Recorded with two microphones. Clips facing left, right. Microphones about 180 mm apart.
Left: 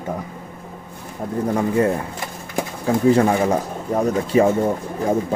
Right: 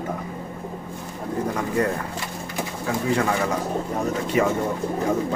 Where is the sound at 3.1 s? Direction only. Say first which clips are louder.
Left 8 dB; 35° left (ahead or behind).